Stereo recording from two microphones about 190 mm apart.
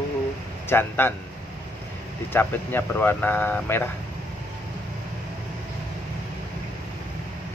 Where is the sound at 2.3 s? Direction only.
10° left (ahead or behind).